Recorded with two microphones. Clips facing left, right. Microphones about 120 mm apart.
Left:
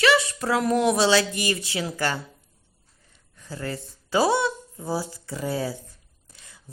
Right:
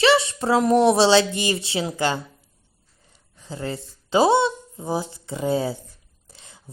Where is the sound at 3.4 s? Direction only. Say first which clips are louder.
Right 2 dB; 20° right (ahead or behind).